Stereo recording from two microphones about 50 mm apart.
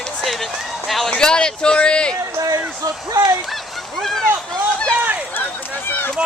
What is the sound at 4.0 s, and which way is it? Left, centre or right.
Speech, centre.